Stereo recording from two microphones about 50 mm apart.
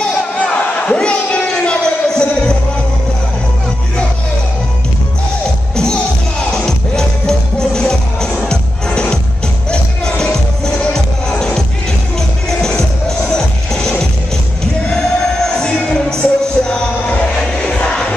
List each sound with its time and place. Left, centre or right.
0.0 s crowd: centre
6.6 s music: centre